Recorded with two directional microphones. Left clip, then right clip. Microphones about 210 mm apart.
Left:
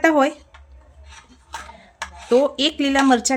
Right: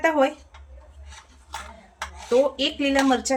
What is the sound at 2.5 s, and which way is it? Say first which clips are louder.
Speech: left 3 dB; 55° left (ahead or behind).